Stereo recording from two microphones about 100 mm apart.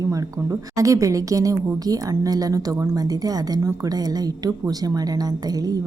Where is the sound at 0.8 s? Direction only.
35° right (ahead or behind).